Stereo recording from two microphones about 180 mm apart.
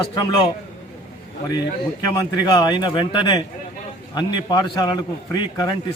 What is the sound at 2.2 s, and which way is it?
A man's voice, 25° left (ahead or behind).